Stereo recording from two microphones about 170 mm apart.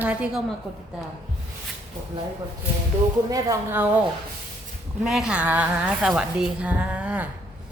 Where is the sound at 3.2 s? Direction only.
20° right (ahead or behind).